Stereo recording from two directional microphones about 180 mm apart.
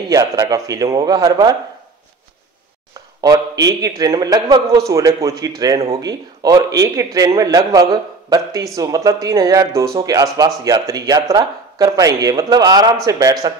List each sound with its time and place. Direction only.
0.1 s speech: 20° right (ahead or behind)
3.2 s a man's voice: 20° right (ahead or behind)